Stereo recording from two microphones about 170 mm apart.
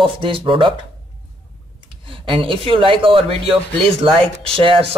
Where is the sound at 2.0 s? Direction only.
30° right (ahead or behind).